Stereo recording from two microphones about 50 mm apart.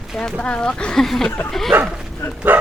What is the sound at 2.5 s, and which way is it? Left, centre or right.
Bow-wow, right.